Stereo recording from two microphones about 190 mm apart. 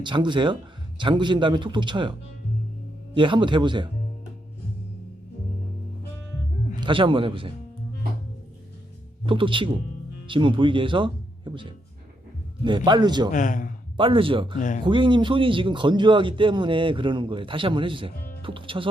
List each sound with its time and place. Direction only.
0.0 s speech: 25° right (ahead or behind)
3.2 s speech: 25° right (ahead or behind)
6.7 s speech: 25° right (ahead or behind)
9.2 s speech: 25° right (ahead or behind)
13.3 s a man's voice: 45° left (ahead or behind)
13.9 s speech: 25° right (ahead or behind)